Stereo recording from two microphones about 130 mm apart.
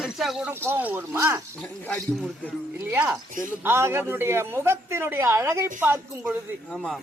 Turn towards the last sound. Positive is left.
turn(degrees=-20)  # may be behind; listen again after turning